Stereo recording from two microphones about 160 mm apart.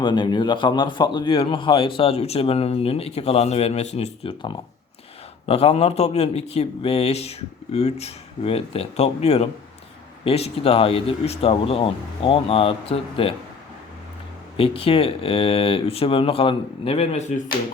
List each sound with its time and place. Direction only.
0.0 s speech: 30° left (ahead or behind)
14.5 s speech: 35° left (ahead or behind)